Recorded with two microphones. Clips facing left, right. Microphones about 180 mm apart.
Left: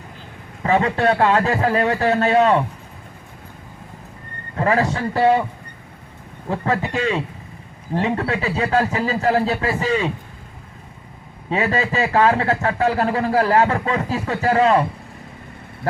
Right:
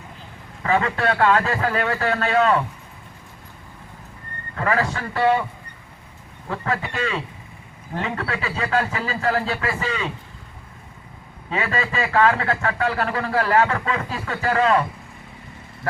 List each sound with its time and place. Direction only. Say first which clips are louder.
0.6 s a man's voice: left 4 dB; 25° left (ahead or behind)
1.1 s a man's voice: right 1 dB; 25° left (ahead or behind)
1.5 s a man's voice: left 4 dB; 35° left (ahead or behind)
4.5 s a man's voice: left 4 dB; 30° left (ahead or behind)
6.5 s a man's voice: left 5 dB; 35° left (ahead or behind)
11.5 s a man's voice: left 4 dB; 35° left (ahead or behind)